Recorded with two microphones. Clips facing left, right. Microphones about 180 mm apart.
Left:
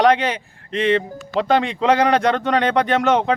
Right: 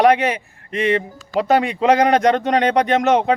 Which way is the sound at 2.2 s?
40° right (ahead or behind).